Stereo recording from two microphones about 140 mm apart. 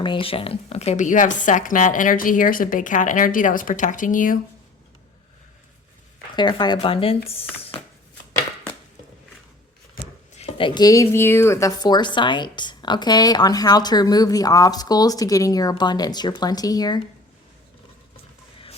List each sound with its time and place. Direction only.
0.0 s a woman's voice: 35° left (ahead or behind); by 4.4 s 70° left (ahead or behind)
6.3 s speech: 30° left (ahead or behind)
10.3 s speech: 40° left (ahead or behind)